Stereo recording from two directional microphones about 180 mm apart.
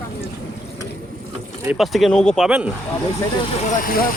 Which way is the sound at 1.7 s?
Centre (ahead or behind).